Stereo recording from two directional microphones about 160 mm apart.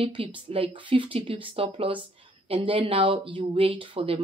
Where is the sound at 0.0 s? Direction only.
30° right (ahead or behind).